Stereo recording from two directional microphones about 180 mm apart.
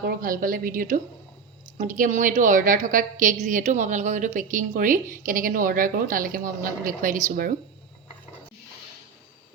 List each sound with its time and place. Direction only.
0.0 s a woman's voice: 55° right (ahead or behind)